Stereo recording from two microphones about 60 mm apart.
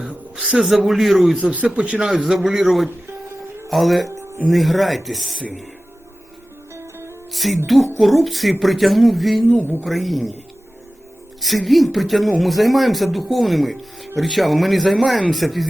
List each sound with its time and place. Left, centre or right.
0.5 s speech: centre
1.4 s a man's voice: right; by 5.4 s centre
7.3 s speech: centre
11.3 s speech: centre